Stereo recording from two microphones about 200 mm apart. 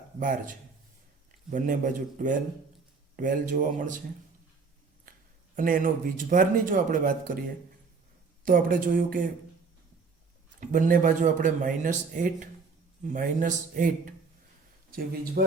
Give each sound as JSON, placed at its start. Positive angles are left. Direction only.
{"t": 0.2, "sound": "speech", "side_deg": -40}
{"t": 5.5, "sound": "speech", "side_deg": -45}
{"t": 10.6, "sound": "speech", "side_deg": -40}
{"t": 15.4, "sound": "speech", "side_deg": -50}